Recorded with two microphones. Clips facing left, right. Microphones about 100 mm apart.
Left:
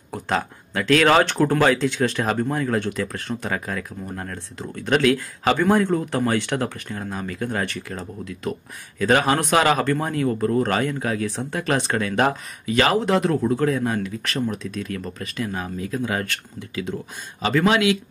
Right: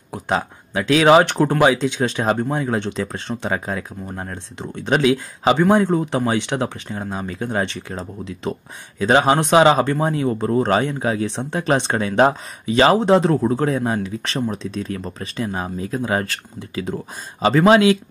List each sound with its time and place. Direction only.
0.1 s speech: 15° right (ahead or behind); by 17.9 s 35° right (ahead or behind)